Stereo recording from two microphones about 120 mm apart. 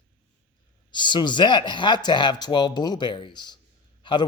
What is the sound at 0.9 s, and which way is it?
A man's voice, 40° left (ahead or behind).